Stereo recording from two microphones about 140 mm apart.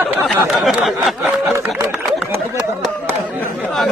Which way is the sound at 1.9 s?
5° right (ahead or behind).